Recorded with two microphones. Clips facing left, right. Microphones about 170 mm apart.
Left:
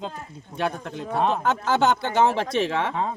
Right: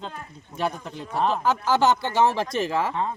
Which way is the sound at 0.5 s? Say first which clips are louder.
Left 1 dB; centre (ahead or behind).